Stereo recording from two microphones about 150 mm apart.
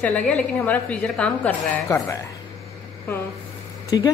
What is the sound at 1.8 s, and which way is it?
Speech, 20° left (ahead or behind).